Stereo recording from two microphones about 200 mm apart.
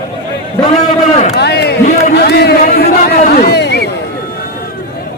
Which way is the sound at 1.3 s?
55° left (ahead or behind).